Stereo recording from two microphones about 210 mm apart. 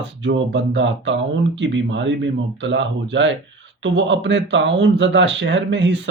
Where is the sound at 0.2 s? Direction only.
60° right (ahead or behind).